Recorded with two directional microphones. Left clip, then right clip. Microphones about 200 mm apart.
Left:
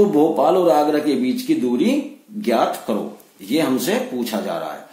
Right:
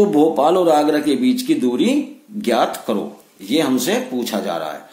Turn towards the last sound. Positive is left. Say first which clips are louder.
# right 2 dB
turn(degrees=-30)  # may be behind; listen again after turning